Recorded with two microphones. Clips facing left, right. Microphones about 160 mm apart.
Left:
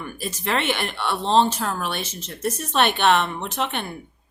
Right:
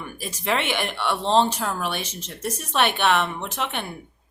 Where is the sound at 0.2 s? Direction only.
10° right (ahead or behind).